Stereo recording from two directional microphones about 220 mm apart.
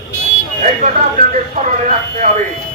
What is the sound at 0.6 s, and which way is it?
Buzzer, 35° right (ahead or behind).